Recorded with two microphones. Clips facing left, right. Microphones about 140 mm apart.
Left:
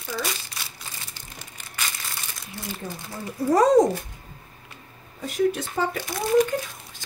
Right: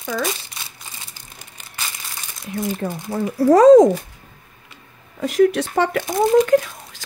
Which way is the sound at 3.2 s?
90° right.